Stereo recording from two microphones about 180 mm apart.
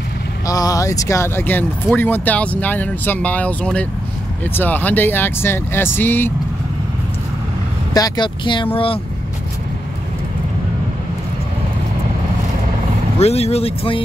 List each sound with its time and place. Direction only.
0.5 s speech: 20° left (ahead or behind)
7.9 s speech: 25° left (ahead or behind)
13.2 s speech: 35° left (ahead or behind)